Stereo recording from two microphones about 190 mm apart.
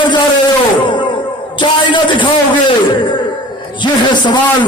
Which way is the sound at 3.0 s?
25° left (ahead or behind).